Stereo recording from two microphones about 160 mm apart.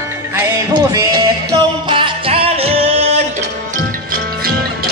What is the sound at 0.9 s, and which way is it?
Music, 20° right (ahead or behind).